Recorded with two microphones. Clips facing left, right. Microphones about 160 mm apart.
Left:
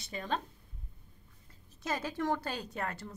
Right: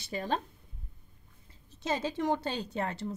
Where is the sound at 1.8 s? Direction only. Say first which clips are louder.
Right 3 dB; 25° right (ahead or behind).